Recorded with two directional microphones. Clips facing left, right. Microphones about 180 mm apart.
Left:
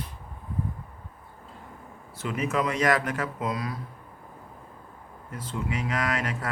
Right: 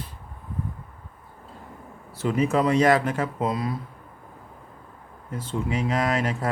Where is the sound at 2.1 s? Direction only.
30° right (ahead or behind).